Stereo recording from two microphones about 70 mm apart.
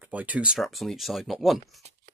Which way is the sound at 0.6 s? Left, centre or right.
Centre.